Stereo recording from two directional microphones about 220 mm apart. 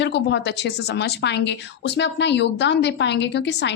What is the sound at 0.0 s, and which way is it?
A woman's voice, 55° left (ahead or behind).